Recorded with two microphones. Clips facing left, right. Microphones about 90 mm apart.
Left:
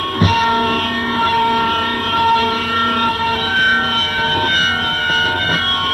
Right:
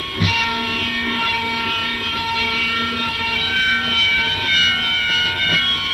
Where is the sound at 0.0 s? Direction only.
40° left (ahead or behind).